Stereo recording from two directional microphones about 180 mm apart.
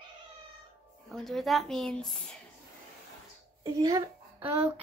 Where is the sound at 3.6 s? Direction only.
20° right (ahead or behind).